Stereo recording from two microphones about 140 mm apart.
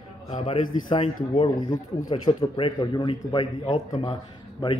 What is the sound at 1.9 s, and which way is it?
Speech, 25° left (ahead or behind).